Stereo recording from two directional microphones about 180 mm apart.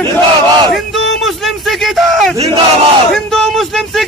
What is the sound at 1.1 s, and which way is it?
Speech, centre (ahead or behind).